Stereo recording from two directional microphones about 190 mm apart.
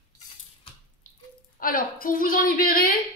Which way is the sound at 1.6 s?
50° left (ahead or behind).